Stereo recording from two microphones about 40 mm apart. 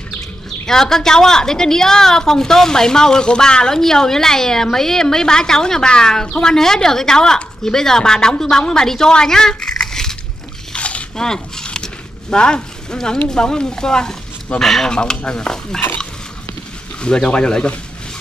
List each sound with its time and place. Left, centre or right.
0.7 s a woman's voice: centre
10.7 s a sound: left
11.1 s a sound: centre
12.9 s a woman's voice: centre
14.9 s speech: left
17.0 s speech: left